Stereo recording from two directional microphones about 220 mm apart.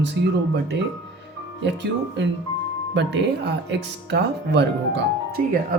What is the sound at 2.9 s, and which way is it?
Speech, 50° right (ahead or behind).